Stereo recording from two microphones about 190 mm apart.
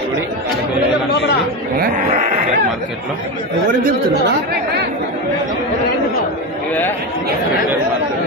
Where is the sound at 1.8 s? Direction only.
40° right (ahead or behind).